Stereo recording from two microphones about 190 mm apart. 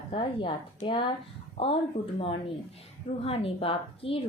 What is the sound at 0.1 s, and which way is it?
A woman's voice, 30° left (ahead or behind).